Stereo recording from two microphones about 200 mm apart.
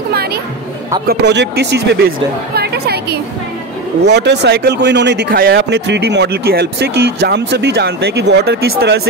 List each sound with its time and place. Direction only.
0.1 s music: 50° right (ahead or behind)
1.0 s speech: 60° right (ahead or behind)
2.5 s chatter: 55° right (ahead or behind)
4.0 s speech: 55° right (ahead or behind)